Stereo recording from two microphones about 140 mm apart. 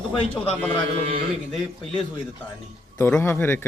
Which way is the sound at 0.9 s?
45° right (ahead or behind).